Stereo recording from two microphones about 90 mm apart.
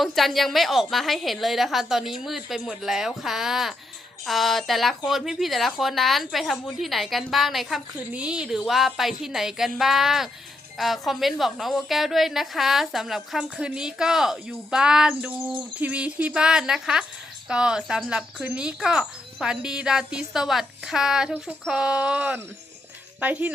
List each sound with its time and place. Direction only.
0.0 s a woman's voice: centre (ahead or behind); by 23.5 s 15° right (ahead or behind)